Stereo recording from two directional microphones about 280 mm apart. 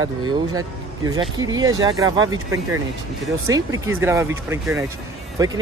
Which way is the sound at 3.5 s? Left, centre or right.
Centre.